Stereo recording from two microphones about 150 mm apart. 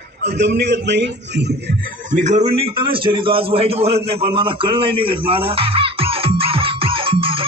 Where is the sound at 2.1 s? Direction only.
55° right (ahead or behind).